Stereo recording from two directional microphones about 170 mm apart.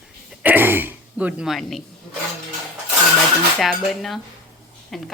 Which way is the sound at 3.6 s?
Centre (ahead or behind).